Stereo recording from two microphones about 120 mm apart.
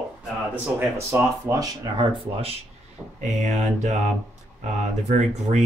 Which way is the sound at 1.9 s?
50° right (ahead or behind).